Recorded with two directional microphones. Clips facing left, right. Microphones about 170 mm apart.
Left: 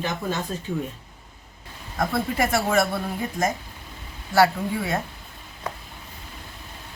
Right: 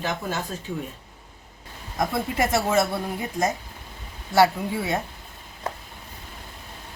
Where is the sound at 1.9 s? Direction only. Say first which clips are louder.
Left 1 dB; 20° right (ahead or behind).